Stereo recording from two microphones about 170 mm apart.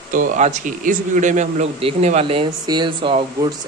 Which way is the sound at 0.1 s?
50° right (ahead or behind).